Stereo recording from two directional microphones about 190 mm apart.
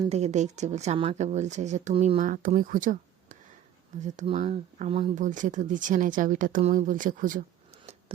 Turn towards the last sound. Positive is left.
turn(degrees=-45)  # may be behind; listen again after turning